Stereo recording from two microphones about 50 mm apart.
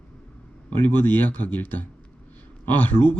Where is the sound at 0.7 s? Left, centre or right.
Left.